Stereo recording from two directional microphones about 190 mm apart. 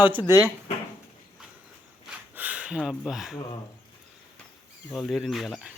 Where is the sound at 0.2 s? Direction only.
20° left (ahead or behind).